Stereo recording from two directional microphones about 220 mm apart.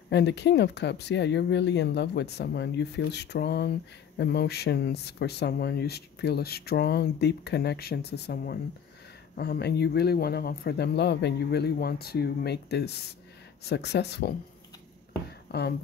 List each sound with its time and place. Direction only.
0.1 s speech: 50° left (ahead or behind)
15.5 s speech: 50° left (ahead or behind)